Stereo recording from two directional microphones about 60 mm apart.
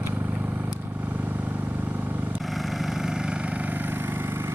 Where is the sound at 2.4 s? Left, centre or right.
Centre.